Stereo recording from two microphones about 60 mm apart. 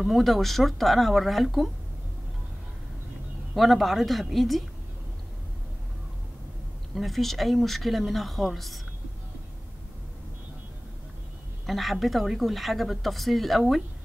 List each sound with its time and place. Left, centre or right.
0.0 s speech: centre
3.5 s speech: centre
7.0 s speech: centre
11.6 s speech: centre